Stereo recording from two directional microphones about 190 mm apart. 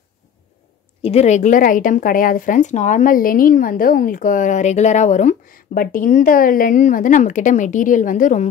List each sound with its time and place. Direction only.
1.0 s a woman's voice: 35° left (ahead or behind)